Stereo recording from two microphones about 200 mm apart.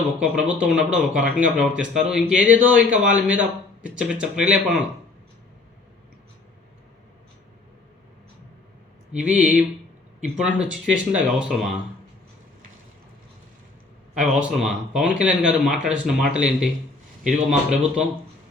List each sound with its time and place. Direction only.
0.2 s speech: 5° right (ahead or behind)
9.1 s speech: 5° right (ahead or behind)
14.4 s speech: centre (ahead or behind)